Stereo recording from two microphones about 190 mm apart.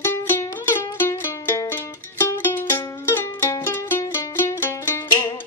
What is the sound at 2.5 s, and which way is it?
Music, 10° left (ahead or behind).